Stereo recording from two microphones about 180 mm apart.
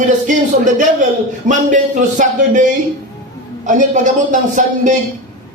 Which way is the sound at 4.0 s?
45° right (ahead or behind).